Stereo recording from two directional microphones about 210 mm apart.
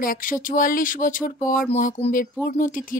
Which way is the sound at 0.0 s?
40° left (ahead or behind).